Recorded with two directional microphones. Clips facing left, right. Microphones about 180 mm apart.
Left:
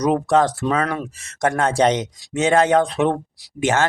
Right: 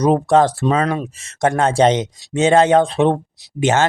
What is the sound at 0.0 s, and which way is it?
Speech, 30° right (ahead or behind).